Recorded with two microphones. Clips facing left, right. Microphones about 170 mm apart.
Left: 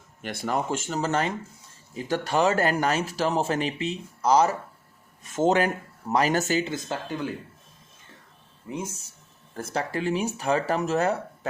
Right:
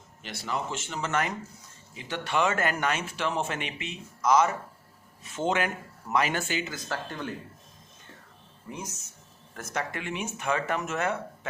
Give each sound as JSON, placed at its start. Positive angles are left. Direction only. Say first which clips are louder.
{"t": 0.2, "sound": "speech", "louder": "left 5 dB", "side_deg": 50}
{"t": 5.2, "sound": "speech", "louder": "left 6 dB", "side_deg": 45}
{"t": 6.7, "sound": "speech", "louder": "left 5 dB", "side_deg": 20}
{"t": 8.7, "sound": "speech", "louder": "left 6 dB", "side_deg": 30}